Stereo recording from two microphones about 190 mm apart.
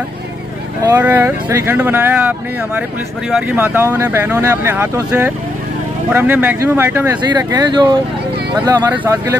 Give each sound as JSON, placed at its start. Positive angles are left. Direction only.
{"t": 0.8, "sound": "speech", "side_deg": -15}
{"t": 7.2, "sound": "speech", "side_deg": -20}
{"t": 8.6, "sound": "speech", "side_deg": -10}